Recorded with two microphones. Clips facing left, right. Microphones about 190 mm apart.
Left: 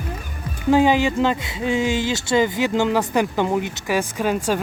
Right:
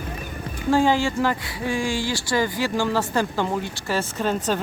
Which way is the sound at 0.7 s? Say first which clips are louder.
Left 3 dB; 20° left (ahead or behind).